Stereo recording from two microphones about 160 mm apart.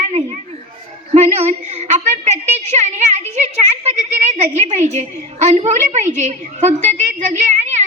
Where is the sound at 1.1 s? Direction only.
45° right (ahead or behind).